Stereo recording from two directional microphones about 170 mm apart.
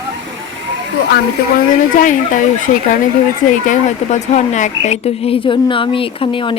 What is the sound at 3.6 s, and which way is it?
Speech, 45° left (ahead or behind).